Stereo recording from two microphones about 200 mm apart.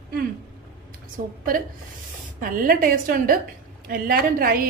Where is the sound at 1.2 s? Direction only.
45° right (ahead or behind).